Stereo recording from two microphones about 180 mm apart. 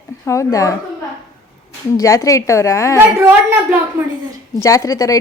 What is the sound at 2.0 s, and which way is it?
A woman's voice, 15° left (ahead or behind).